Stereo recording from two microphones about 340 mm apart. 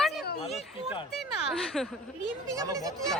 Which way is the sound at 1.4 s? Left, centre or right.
Centre.